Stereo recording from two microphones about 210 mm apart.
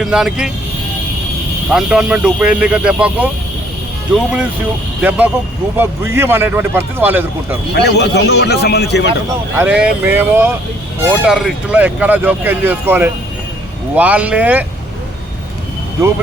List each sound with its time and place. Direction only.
0.0 s speech: centre (ahead or behind)
1.7 s speech: 5° right (ahead or behind)
7.7 s a man's voice: 50° left (ahead or behind)
9.3 s speech: 10° right (ahead or behind)